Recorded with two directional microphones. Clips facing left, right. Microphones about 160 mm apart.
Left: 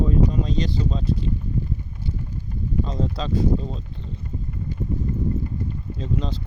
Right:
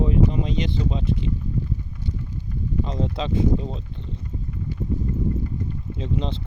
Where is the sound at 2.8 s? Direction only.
20° right (ahead or behind).